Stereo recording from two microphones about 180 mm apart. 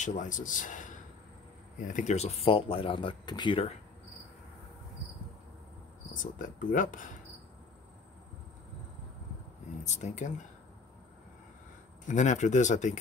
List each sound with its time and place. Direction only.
0.0 s speech: 45° left (ahead or behind)
6.1 s speech: 50° left (ahead or behind)
9.8 s speech: 40° left (ahead or behind)
12.1 s speech: 40° left (ahead or behind)